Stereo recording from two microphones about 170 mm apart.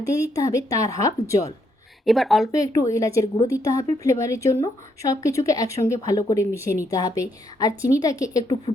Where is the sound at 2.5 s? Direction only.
20° left (ahead or behind).